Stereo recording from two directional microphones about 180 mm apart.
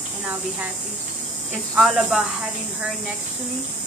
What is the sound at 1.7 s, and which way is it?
Speech, 5° right (ahead or behind).